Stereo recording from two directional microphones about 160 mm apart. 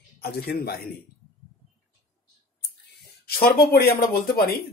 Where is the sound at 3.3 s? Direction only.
75° left (ahead or behind).